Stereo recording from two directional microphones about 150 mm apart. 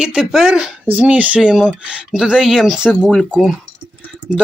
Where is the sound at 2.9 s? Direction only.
5° left (ahead or behind).